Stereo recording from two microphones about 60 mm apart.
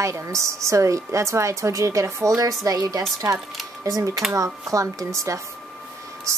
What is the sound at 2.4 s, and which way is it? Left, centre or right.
Speech, right.